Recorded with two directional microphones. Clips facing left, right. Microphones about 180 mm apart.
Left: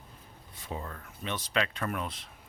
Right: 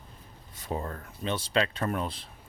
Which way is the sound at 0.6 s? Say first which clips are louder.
Right 5 dB; 45° right (ahead or behind).